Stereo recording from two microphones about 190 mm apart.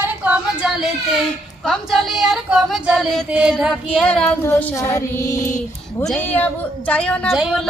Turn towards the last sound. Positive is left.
turn(degrees=0)  # may be behind; listen again after turning